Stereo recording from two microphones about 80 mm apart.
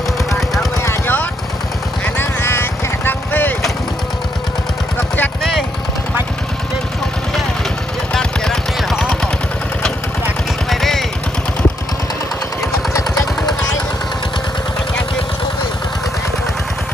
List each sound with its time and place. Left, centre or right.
0.8 s a sound: left
2.0 s vehicle: left
4.9 s vehicle: left
5.4 s vehicle: centre
8.1 s a sound: centre
10.7 s vehicle: centre
12.9 s vehicle: left